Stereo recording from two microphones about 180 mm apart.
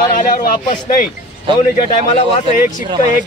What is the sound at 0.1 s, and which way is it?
Speech, 50° left (ahead or behind).